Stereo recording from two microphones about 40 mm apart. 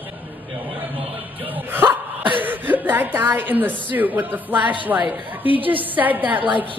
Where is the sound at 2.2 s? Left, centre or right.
Right.